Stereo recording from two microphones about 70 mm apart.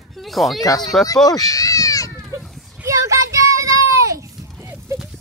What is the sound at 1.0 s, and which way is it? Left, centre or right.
Speech, left.